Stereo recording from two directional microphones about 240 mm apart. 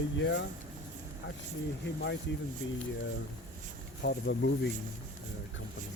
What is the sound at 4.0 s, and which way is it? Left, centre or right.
Speech, left.